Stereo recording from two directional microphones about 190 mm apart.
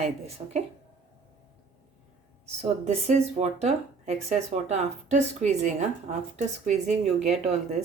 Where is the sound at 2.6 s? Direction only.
35° right (ahead or behind).